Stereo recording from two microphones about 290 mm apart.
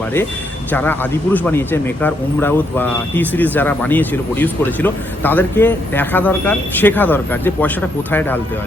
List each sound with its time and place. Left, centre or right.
0.7 s speech: centre